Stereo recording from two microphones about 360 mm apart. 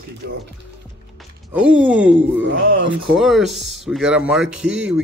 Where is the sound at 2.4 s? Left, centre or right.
Right.